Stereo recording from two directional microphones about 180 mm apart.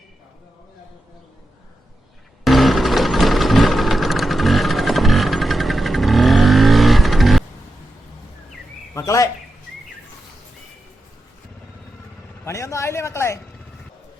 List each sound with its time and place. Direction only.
2.4 s sewing machine: centre (ahead or behind)
9.0 s speech: 20° left (ahead or behind)
12.5 s a sound: 15° left (ahead or behind)